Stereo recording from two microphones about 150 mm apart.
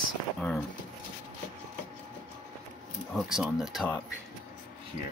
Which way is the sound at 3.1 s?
Centre (ahead or behind).